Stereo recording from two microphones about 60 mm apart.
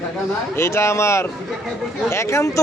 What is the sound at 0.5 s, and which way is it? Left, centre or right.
Speech, left.